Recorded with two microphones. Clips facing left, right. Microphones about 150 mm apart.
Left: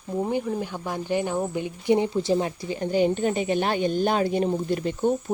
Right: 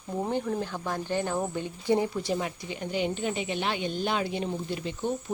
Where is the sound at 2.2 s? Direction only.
30° left (ahead or behind).